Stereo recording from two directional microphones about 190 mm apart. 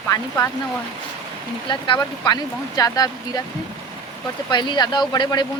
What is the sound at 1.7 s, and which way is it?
Speech, 25° left (ahead or behind).